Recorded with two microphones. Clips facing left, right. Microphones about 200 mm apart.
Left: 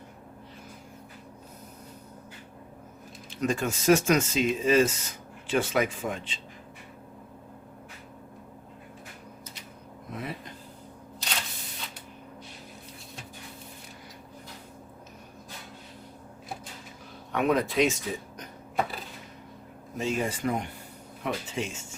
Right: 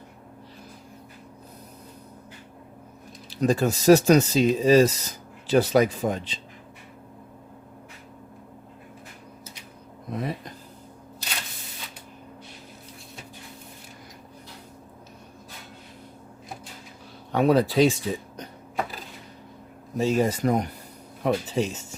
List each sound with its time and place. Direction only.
3.2 s speech: 35° right (ahead or behind)
10.1 s speech: 40° right (ahead or behind)
17.3 s speech: 35° right (ahead or behind)
20.0 s speech: 40° right (ahead or behind)